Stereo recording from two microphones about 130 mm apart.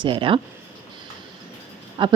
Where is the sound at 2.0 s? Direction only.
40° right (ahead or behind).